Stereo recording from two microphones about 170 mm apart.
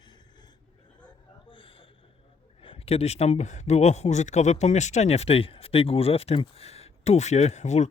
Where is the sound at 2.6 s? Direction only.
35° left (ahead or behind).